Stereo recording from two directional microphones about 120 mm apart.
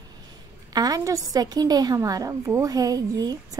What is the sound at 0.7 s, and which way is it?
A woman's voice, 30° right (ahead or behind).